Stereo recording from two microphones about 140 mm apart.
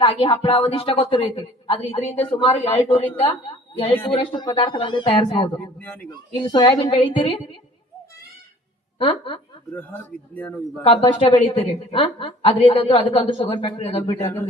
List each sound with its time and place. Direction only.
0.0 s a woman's voice: 35° left (ahead or behind)
9.0 s a woman's voice: 40° left (ahead or behind)
9.7 s a man's voice: 15° left (ahead or behind)
10.8 s a woman's voice: 40° left (ahead or behind)